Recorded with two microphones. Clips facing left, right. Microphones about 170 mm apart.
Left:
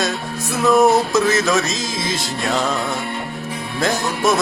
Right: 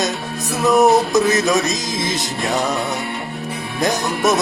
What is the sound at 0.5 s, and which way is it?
Music, 20° right (ahead or behind).